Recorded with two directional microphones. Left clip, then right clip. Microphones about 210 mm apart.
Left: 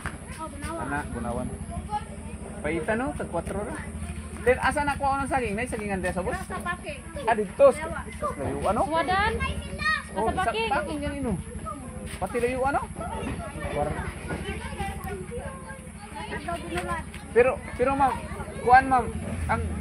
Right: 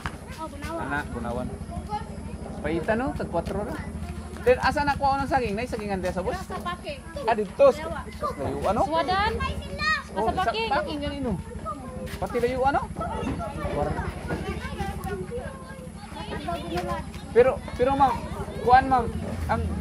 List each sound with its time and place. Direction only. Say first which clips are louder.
0.9 s a child's voice: right 1 dB; 30° left (ahead or behind)
2.6 s a child's voice: right 1 dB; 25° left (ahead or behind)
6.3 s speech: even; 5° right (ahead or behind)
7.2 s a child's voice: even; 30° left (ahead or behind)
12.2 s a child's voice: right 1 dB; 35° left (ahead or behind)
17.3 s a child's voice: right 2 dB; 30° left (ahead or behind)